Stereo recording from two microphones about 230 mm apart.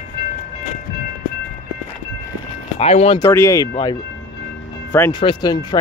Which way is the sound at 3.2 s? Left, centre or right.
Centre.